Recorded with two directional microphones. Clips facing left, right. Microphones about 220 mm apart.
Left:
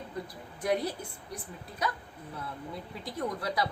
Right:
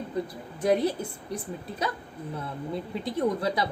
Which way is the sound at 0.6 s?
25° right (ahead or behind).